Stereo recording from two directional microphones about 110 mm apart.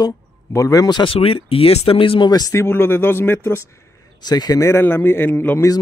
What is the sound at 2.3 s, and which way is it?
Speech, 35° left (ahead or behind).